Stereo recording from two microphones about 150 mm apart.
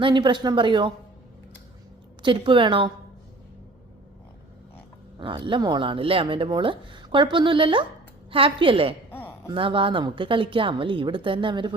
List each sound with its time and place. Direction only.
0.0 s speech: 30° right (ahead or behind)
2.2 s speech: 35° right (ahead or behind)
5.2 s speech: 35° right (ahead or behind)